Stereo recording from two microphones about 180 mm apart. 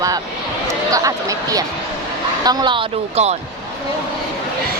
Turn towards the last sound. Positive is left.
turn(degrees=-35)  # may be behind; listen again after turning